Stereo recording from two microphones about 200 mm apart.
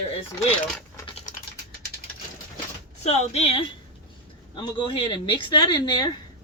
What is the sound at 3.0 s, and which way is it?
Speech, 30° left (ahead or behind).